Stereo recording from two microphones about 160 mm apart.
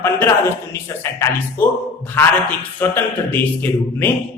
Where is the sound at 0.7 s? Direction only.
15° left (ahead or behind).